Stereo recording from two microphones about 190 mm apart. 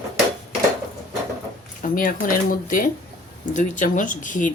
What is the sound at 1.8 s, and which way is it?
Speech, 45° left (ahead or behind).